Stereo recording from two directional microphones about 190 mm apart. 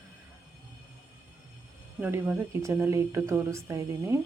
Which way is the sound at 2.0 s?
5° right (ahead or behind).